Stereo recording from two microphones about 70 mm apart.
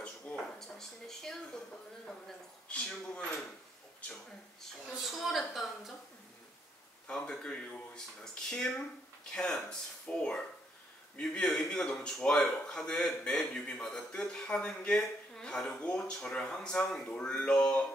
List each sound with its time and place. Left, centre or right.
0.0 s a sound: centre
2.7 s speech: centre
4.6 s a woman's voice: centre
7.1 s speech: centre